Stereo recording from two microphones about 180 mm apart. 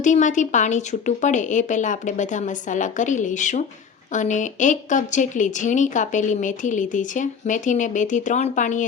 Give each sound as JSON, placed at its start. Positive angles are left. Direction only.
{"t": 0.0, "sound": "a woman's voice", "side_deg": 45}